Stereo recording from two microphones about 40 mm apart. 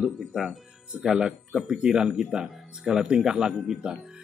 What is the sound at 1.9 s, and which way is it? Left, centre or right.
Speech, right.